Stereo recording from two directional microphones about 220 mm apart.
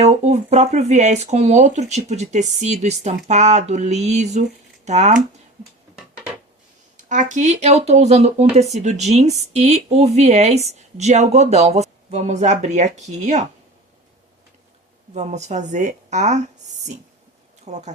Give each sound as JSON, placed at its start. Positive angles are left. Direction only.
{"t": 0.0, "sound": "speech", "side_deg": -30}
{"t": 6.9, "sound": "speech", "side_deg": -35}
{"t": 15.1, "sound": "speech", "side_deg": -30}